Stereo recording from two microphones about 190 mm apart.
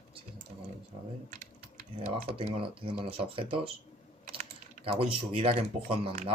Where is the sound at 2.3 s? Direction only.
30° right (ahead or behind).